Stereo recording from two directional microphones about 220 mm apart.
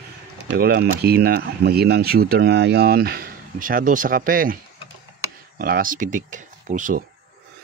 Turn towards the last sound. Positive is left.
turn(degrees=-35)  # may be behind; listen again after turning